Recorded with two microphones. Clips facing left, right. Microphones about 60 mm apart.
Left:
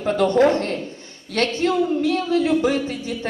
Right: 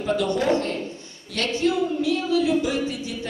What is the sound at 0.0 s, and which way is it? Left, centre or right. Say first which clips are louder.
A woman's voice: left 6 dB; left.